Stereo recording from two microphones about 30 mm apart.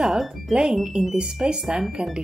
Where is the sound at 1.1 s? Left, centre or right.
Right.